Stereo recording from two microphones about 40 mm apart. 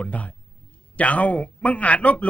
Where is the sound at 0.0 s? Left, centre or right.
Left.